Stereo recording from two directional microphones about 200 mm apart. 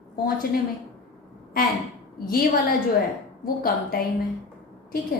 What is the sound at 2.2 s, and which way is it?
A woman's voice, 45° left (ahead or behind).